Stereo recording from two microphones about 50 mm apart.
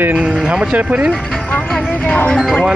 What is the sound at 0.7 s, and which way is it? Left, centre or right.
Speech, right.